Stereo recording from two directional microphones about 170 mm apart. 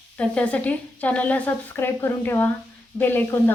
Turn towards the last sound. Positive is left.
turn(degrees=10)  # may be behind; listen again after turning